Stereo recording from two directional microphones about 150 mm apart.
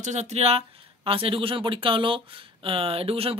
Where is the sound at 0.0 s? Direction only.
50° right (ahead or behind).